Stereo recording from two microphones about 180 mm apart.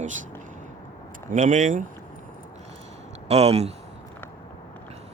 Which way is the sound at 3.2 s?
35° right (ahead or behind).